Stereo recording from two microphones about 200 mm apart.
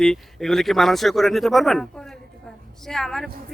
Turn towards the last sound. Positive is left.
turn(degrees=0)  # may be behind; listen again after turning